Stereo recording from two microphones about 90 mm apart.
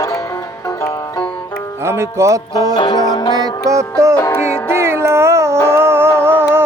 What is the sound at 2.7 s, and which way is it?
Music, 55° left (ahead or behind).